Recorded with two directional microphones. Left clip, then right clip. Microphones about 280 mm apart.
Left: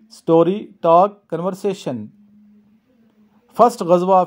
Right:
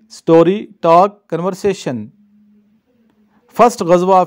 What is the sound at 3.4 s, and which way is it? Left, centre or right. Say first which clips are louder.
Speech: right 3 dB; right.